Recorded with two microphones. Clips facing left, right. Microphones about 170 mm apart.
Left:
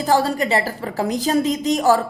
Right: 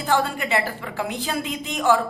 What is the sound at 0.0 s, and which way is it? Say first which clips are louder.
A woman's voice: left 5 dB; 35° left (ahead or behind).